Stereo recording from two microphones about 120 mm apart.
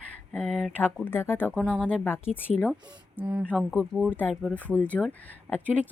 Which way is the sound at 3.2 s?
10° right (ahead or behind).